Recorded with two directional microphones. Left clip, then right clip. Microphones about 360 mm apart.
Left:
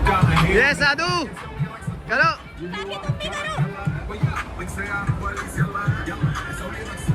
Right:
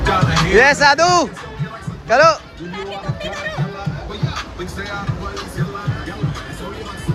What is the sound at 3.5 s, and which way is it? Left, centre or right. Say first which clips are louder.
Music: right 2 dB; right.